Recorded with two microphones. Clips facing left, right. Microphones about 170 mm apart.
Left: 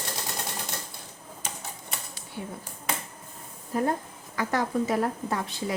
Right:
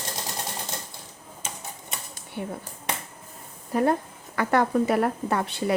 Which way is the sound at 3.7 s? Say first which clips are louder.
Right 4 dB; 70° right (ahead or behind).